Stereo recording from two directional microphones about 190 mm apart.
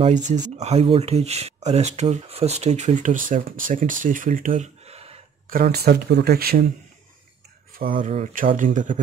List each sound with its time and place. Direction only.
0.3 s speech: 35° right (ahead or behind)
5.5 s speech: 55° right (ahead or behind)
8.0 s speech: 40° right (ahead or behind)